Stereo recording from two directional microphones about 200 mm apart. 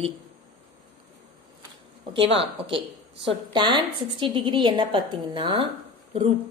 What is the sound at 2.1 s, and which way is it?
A woman's voice, 25° right (ahead or behind).